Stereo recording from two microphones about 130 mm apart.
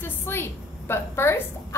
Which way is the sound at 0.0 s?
15° left (ahead or behind).